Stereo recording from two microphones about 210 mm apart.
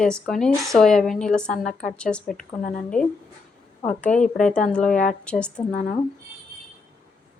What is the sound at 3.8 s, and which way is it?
A woman's voice, 5° left (ahead or behind).